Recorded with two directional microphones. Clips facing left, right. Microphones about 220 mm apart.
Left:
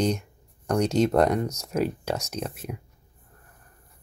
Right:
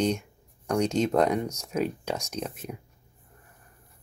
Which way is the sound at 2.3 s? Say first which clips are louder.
Left 1 dB; 5° left (ahead or behind).